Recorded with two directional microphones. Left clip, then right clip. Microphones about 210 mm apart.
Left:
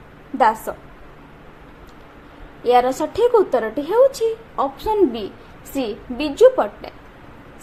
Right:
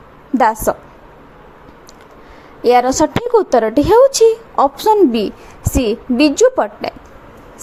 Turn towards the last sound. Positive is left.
turn(degrees=-40)  # may be behind; listen again after turning